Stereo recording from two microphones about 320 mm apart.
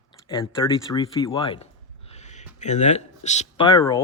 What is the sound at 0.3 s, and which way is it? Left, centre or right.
Speech, centre.